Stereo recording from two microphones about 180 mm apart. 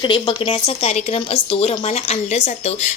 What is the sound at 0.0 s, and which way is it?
A woman's voice, 30° left (ahead or behind).